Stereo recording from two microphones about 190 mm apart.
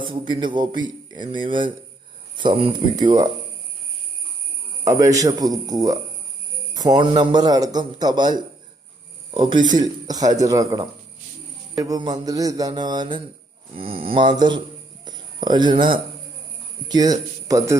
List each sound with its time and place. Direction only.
0.0 s a man's voice: 25° right (ahead or behind)
4.9 s a man's voice: 15° right (ahead or behind)
16.9 s a man's voice: 20° right (ahead or behind)